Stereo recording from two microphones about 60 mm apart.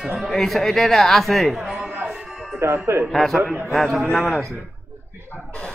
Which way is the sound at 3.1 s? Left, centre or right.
Centre.